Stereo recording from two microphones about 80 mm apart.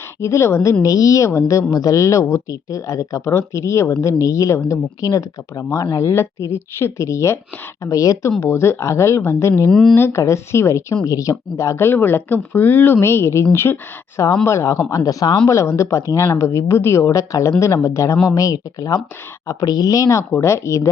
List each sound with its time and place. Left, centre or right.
0.2 s speech: left
6.1 s speech: left
8.4 s speech: left
9.6 s speech: centre
9.9 s speech: left
11.9 s speech: left
15.4 s speech: left
17.1 s speech: left